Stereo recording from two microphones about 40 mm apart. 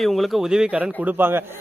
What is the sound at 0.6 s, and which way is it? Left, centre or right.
Speech, right.